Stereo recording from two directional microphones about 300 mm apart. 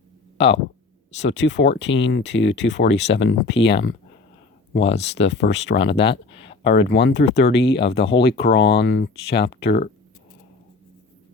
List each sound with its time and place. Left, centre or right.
0.3 s speech: left